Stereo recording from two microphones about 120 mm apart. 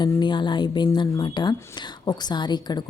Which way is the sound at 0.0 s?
40° left (ahead or behind).